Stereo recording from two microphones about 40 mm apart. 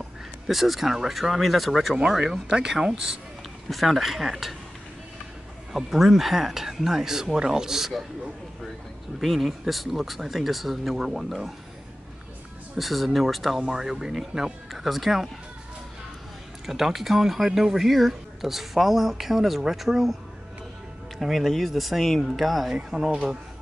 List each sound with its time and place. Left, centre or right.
0.5 s speech: centre
2.0 s speech: right
2.2 s speech: centre
3.7 s speech: centre
5.7 s speech: centre
9.2 s speech: centre
12.7 s speech: centre
13.6 s speech: centre
16.6 s speech: centre
21.2 s speech: centre